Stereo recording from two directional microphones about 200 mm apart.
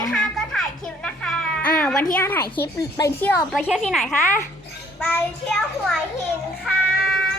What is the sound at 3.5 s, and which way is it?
A woman's voice, 5° right (ahead or behind).